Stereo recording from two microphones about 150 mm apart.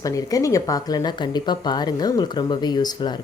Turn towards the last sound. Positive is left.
turn(degrees=30)  # may be behind; listen again after turning